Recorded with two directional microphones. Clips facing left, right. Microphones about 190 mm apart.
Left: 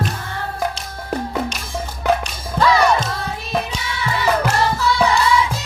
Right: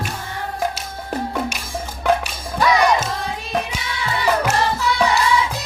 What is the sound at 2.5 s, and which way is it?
Music, 15° right (ahead or behind).